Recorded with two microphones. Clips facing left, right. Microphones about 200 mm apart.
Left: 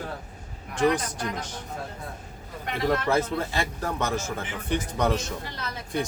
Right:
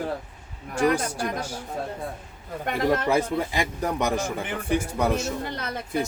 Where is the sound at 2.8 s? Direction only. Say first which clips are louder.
Right 1 dB; 15° right (ahead or behind).